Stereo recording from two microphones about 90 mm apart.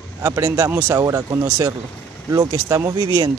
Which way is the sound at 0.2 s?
35° right (ahead or behind).